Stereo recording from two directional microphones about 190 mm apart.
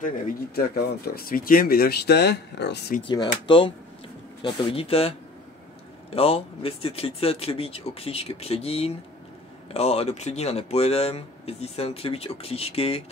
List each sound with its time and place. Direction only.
0.0 s speech: 50° left (ahead or behind)
3.4 s speech: 25° left (ahead or behind)